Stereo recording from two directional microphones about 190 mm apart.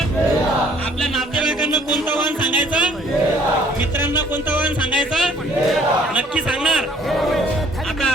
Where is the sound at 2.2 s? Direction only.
25° left (ahead or behind).